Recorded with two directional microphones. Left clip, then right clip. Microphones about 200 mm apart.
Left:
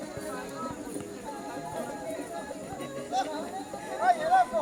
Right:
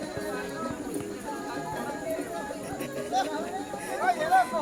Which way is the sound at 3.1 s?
Centre (ahead or behind).